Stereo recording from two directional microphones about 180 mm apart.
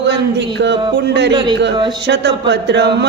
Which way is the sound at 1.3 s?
25° right (ahead or behind).